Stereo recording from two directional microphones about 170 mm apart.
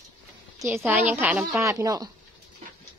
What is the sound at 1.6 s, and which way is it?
Speech, 20° right (ahead or behind).